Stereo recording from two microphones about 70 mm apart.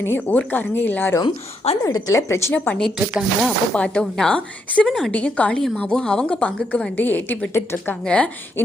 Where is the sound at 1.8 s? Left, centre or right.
Left.